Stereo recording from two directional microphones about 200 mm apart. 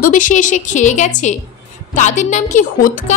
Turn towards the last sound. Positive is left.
turn(degrees=40)  # may be behind; listen again after turning